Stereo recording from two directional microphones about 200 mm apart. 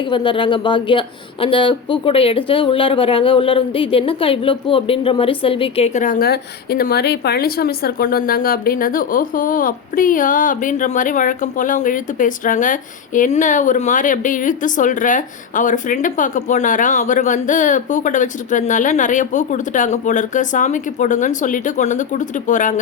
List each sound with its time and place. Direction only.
0.1 s speech: 25° left (ahead or behind); by 22.7 s 40° left (ahead or behind)